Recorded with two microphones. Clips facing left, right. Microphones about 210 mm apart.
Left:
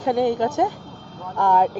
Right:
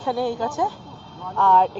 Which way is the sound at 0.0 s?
20° left (ahead or behind).